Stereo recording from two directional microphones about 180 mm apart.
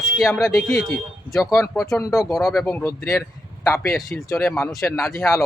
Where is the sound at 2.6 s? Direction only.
10° left (ahead or behind).